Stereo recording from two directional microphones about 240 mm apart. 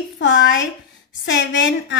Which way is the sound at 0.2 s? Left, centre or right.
Left.